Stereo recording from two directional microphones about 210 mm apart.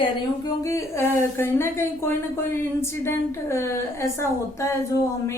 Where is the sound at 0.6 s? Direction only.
15° left (ahead or behind).